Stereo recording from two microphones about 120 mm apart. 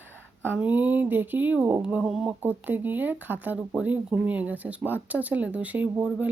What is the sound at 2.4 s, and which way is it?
Speech, 15° right (ahead or behind).